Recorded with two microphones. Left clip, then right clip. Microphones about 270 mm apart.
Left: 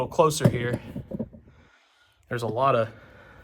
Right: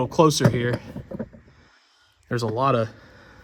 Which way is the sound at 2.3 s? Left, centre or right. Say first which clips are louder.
Right 1 dB; right.